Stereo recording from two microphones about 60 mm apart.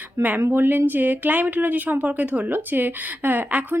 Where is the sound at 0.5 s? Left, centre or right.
Right.